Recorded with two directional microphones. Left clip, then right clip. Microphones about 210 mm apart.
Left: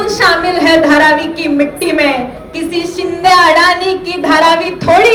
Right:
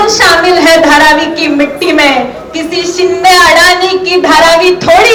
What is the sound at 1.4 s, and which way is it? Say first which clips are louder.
Speech: right 4 dB; 50° left (ahead or behind).